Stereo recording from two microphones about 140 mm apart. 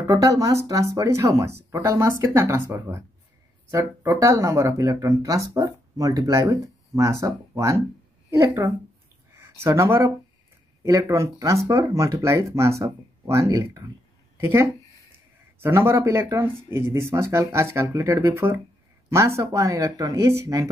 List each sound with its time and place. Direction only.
0.0 s speech: 25° right (ahead or behind)